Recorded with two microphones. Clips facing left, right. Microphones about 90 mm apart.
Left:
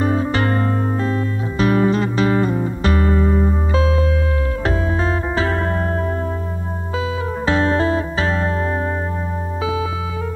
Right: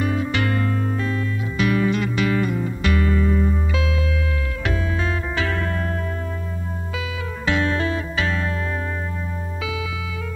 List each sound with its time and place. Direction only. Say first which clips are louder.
0.0 s music: left 4 dB; 35° left (ahead or behind)
7.4 s music: left 4 dB; 35° left (ahead or behind)